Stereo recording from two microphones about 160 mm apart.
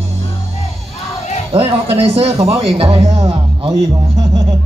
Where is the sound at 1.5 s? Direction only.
35° right (ahead or behind).